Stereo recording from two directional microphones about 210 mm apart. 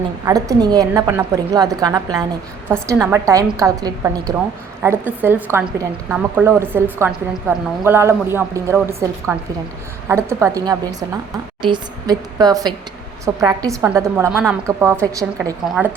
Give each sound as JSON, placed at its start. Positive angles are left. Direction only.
{"t": 0.3, "sound": "a woman's voice", "side_deg": -15}